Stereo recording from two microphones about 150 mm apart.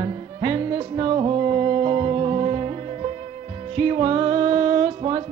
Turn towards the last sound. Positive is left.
turn(degrees=-35)  # may be behind; listen again after turning